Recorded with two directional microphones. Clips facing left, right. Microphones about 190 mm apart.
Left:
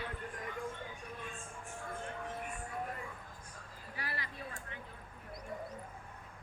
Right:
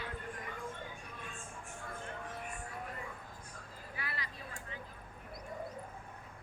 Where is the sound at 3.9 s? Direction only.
45° left (ahead or behind).